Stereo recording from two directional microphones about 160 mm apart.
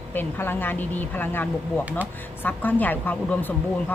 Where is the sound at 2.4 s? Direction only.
10° left (ahead or behind).